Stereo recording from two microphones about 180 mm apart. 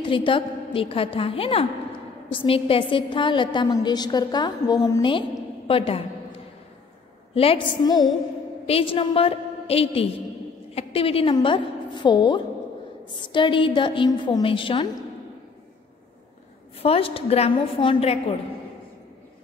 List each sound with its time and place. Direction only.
0.0 s a woman's voice: 30° left (ahead or behind)
5.7 s a sound: 30° left (ahead or behind)
7.3 s a woman's voice: 30° left (ahead or behind)
16.8 s a woman's voice: 30° left (ahead or behind)